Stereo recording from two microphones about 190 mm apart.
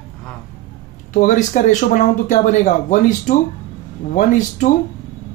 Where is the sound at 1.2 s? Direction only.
40° left (ahead or behind).